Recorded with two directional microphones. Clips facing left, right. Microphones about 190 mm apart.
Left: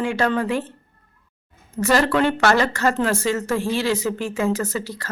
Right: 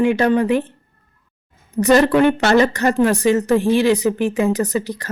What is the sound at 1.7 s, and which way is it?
A woman's voice, 20° right (ahead or behind).